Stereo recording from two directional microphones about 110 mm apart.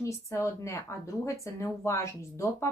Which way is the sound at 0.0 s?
25° left (ahead or behind).